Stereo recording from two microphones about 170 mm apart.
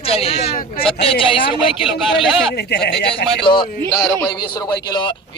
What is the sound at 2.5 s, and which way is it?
Speech, 70° left (ahead or behind).